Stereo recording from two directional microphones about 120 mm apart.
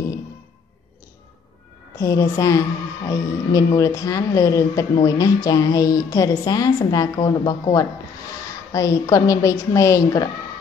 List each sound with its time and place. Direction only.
2.0 s a woman's voice: 25° left (ahead or behind)